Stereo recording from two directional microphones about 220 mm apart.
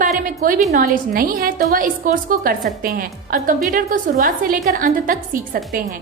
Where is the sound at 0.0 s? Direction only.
40° right (ahead or behind).